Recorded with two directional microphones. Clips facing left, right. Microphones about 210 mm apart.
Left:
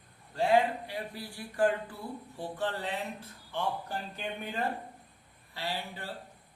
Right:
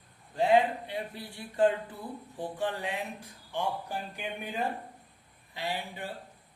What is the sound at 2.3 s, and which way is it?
A man's voice, 15° right (ahead or behind).